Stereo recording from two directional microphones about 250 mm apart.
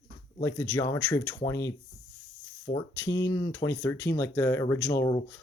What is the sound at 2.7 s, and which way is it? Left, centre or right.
Speech, left.